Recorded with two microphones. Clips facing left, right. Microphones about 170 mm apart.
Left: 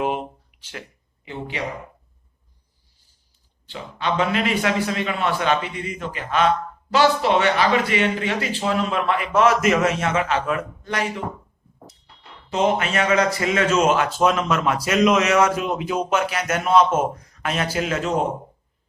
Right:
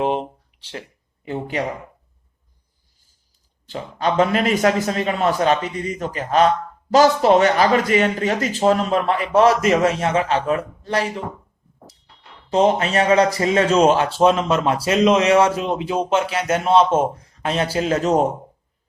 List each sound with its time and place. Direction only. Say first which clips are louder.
0.0 s a sound: right 3 dB; 30° right (ahead or behind)
3.7 s speech: right 3 dB; 40° right (ahead or behind)
12.5 s speech: right 4 dB; 35° right (ahead or behind)